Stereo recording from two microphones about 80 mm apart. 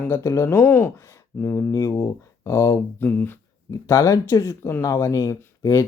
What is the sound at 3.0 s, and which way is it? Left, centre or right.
Speech, left.